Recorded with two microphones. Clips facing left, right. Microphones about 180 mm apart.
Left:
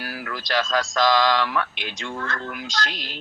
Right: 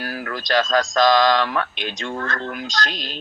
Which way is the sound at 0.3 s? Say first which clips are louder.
Right 4 dB; 20° right (ahead or behind).